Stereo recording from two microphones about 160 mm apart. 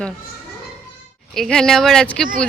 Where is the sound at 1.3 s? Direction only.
5° left (ahead or behind).